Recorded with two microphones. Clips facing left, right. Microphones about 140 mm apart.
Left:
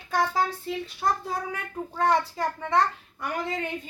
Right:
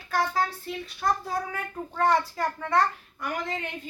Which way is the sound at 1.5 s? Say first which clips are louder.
Left 1 dB; 20° left (ahead or behind).